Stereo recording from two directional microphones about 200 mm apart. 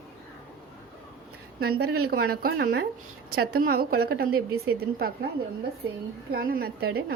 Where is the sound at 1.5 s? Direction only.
50° right (ahead or behind).